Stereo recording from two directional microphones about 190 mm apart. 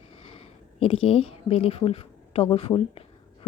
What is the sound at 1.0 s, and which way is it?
A woman's voice, 30° left (ahead or behind).